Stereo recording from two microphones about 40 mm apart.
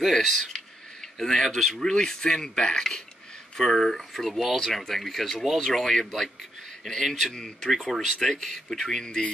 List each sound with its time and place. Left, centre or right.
0.0 s speech: centre
7.0 s speech: centre
7.3 s speech: centre